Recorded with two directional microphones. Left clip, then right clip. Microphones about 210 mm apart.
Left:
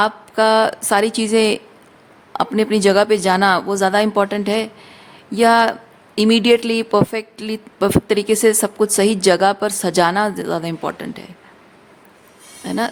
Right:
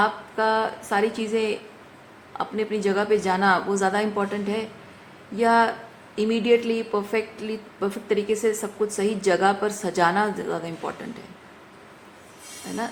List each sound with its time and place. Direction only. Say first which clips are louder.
0.0 s a woman's voice: left 7 dB; 55° left (ahead or behind)